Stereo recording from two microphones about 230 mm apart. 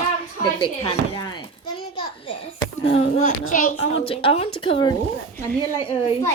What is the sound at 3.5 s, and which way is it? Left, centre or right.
Speech, left.